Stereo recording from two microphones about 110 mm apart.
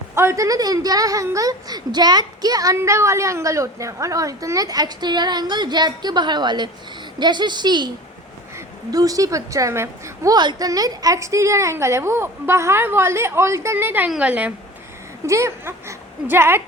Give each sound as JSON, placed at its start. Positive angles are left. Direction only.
{"t": 0.2, "sound": "a woman's voice", "side_deg": -25}
{"t": 10.3, "sound": "a woman's voice", "side_deg": -40}
{"t": 15.3, "sound": "speech", "side_deg": -25}